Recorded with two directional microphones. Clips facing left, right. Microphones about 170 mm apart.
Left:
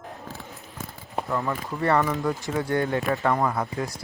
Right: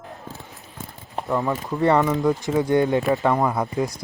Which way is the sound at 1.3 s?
20° right (ahead or behind).